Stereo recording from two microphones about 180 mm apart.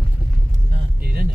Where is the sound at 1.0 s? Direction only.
55° right (ahead or behind).